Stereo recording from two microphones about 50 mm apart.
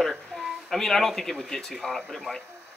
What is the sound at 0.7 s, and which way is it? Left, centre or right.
Speech, centre.